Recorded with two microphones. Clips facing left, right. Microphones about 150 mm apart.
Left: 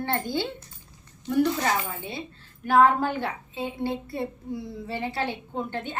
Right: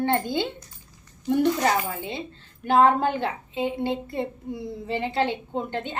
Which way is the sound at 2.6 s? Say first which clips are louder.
Right 1 dB; 25° right (ahead or behind).